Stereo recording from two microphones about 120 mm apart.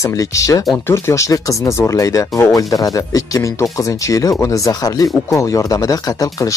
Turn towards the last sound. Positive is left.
turn(degrees=30)  # may be behind; listen again after turning